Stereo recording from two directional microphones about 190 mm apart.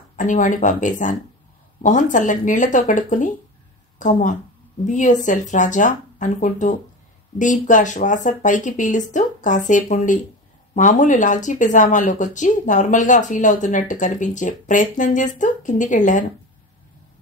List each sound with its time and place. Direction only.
0.1 s speech: 40° left (ahead or behind)